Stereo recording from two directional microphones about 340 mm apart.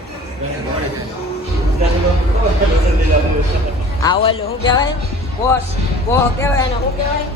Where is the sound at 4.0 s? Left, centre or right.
Centre.